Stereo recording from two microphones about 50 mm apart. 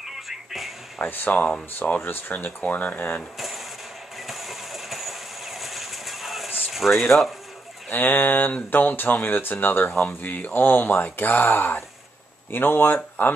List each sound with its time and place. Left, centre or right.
0.0 s music: centre
1.0 s speech: left
2.6 s speech: left
3.3 s mechanisms: centre
4.3 s vehicle: centre
6.7 s speech: centre
7.9 s speech: left